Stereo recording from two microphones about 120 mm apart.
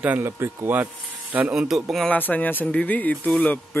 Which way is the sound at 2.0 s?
15° left (ahead or behind).